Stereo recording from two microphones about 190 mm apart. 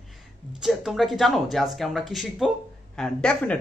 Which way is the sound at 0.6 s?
Centre (ahead or behind).